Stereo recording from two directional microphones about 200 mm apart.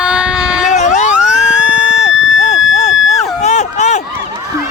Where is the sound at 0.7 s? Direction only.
35° left (ahead or behind).